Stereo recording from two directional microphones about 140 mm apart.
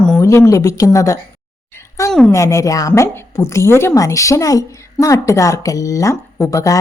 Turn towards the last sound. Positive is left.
turn(degrees=25)  # may be behind; listen again after turning